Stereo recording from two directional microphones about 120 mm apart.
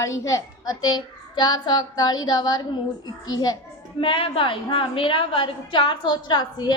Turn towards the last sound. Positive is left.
turn(degrees=35)  # may be behind; listen again after turning